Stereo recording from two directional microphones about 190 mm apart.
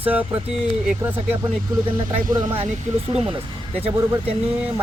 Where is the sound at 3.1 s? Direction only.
30° right (ahead or behind).